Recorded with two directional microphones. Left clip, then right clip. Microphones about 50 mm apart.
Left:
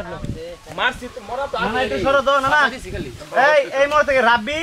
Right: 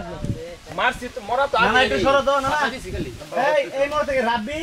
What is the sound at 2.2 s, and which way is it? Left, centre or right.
Speech, centre.